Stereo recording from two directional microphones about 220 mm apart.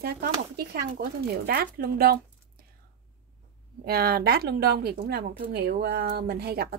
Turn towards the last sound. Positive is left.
turn(degrees=-45)  # may be behind; listen again after turning